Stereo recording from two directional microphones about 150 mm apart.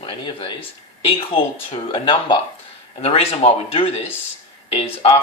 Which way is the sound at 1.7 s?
35° left (ahead or behind).